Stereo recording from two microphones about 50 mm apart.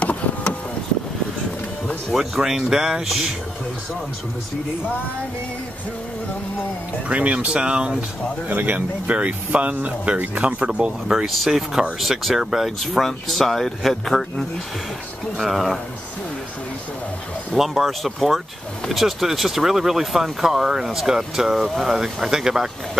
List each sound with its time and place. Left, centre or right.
0.0 s a sound: left
2.1 s speech: centre
7.1 s speech: right
8.5 s speech: right
11.2 s speech: centre
12.4 s speech: centre
12.6 s speech: centre
15.4 s speech: centre
17.6 s speech: centre